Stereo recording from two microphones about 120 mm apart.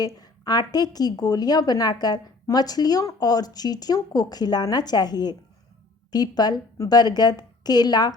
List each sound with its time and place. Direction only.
0.0 s a woman's voice: 35° left (ahead or behind)